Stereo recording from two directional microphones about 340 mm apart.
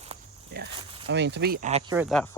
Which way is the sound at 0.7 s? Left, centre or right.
Centre.